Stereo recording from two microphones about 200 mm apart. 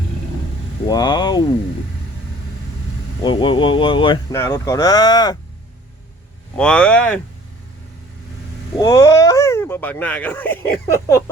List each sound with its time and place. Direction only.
0.9 s speech: 20° left (ahead or behind)
3.2 s speech: 25° left (ahead or behind)
6.6 s speech: 5° left (ahead or behind)
8.8 s speech: 15° left (ahead or behind)